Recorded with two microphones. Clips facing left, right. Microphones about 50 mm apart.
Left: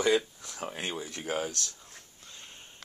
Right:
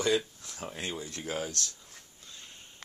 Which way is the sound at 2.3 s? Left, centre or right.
Left.